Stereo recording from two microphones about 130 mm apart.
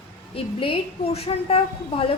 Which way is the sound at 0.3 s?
45° left (ahead or behind).